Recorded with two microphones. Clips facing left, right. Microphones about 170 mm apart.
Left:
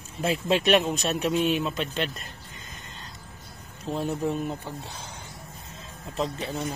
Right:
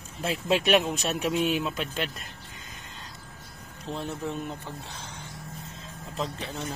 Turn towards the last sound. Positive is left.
turn(degrees=5)  # may be behind; listen again after turning